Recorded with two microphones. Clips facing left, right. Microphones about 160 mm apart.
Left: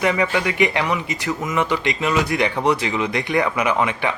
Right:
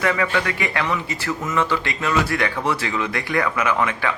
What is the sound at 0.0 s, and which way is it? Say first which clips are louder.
A man's voice: left 2 dB; 20° left (ahead or behind).